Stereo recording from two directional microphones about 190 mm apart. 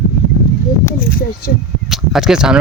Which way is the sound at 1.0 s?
50° left (ahead or behind).